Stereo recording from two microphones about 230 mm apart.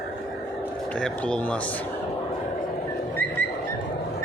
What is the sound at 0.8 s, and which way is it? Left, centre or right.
Speech, centre.